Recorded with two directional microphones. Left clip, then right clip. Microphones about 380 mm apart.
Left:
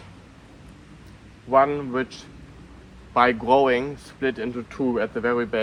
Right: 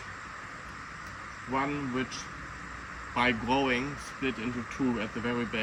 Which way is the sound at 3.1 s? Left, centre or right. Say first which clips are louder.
Left 10 dB; centre.